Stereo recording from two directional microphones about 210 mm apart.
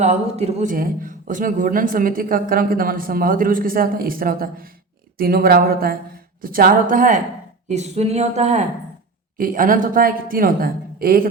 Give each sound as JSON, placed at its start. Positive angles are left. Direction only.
{"t": 0.0, "sound": "a man's voice", "side_deg": -30}